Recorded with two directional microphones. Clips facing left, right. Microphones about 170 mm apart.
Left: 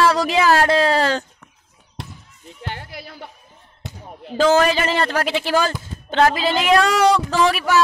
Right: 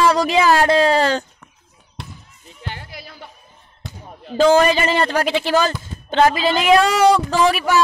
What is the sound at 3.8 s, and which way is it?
Basketball bounce, 15° left (ahead or behind).